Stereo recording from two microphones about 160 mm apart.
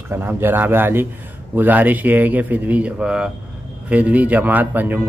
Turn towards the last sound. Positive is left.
turn(degrees=-10)  # may be behind; listen again after turning